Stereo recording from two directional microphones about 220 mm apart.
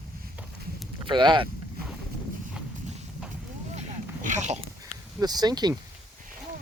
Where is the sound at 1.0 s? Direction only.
20° right (ahead or behind).